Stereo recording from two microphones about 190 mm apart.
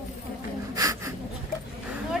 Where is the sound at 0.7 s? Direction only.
15° right (ahead or behind).